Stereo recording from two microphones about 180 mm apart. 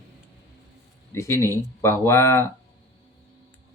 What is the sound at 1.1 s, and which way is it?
Speech, 15° left (ahead or behind).